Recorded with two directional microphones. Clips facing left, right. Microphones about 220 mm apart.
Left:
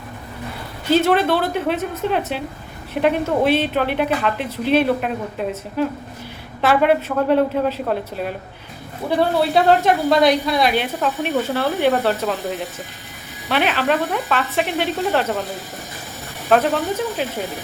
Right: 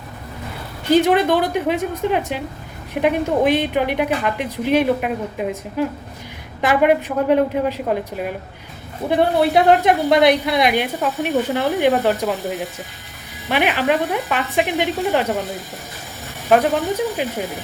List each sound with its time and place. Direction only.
0.9 s a woman's voice: 15° right (ahead or behind)
16.5 s a woman's voice: 10° right (ahead or behind)